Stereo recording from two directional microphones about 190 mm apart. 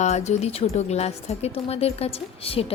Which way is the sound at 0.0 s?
35° left (ahead or behind).